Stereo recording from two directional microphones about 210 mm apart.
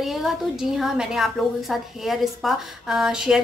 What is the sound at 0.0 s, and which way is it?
A woman's voice, centre (ahead or behind).